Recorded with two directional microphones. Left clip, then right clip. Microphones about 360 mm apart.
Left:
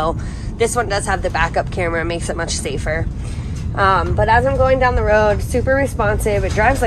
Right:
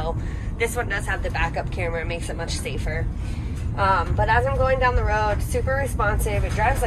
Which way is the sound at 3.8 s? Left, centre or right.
Left.